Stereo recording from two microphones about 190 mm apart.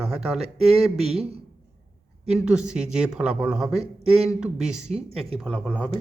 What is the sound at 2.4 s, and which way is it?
A man's voice, 5° right (ahead or behind).